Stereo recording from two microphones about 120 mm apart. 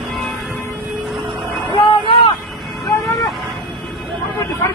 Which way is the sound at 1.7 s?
45° left (ahead or behind).